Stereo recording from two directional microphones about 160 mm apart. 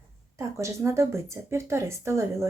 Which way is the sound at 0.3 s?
20° right (ahead or behind).